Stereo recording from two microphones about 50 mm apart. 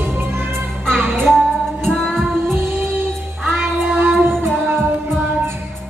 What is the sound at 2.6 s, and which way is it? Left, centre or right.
Music, right.